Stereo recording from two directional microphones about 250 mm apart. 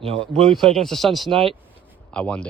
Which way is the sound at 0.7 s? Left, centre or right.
Centre.